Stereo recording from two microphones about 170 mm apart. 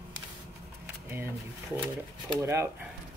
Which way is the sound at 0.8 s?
15° right (ahead or behind).